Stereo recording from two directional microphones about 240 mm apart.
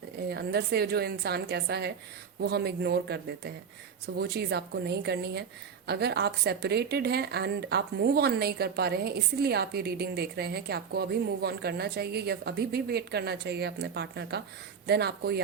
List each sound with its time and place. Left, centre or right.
0.3 s a woman's voice: right